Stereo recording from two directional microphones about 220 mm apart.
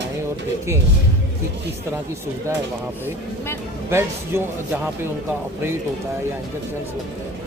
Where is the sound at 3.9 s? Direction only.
10° right (ahead or behind).